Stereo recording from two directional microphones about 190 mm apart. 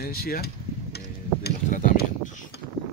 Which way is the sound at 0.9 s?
55° left (ahead or behind).